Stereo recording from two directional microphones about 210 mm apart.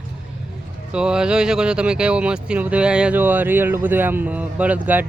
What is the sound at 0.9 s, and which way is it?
Speech, 5° right (ahead or behind).